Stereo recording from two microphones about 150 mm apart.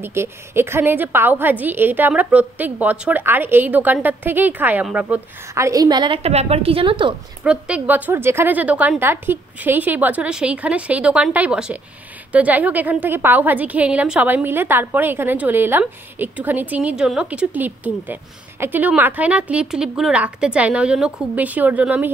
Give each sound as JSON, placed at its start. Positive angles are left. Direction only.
{"t": 0.0, "sound": "a woman's voice", "side_deg": -15}
{"t": 5.5, "sound": "a woman's voice", "side_deg": -20}
{"t": 7.4, "sound": "a woman's voice", "side_deg": -5}